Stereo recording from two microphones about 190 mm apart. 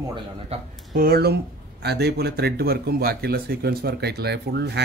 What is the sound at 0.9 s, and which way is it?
Speech, 50° right (ahead or behind).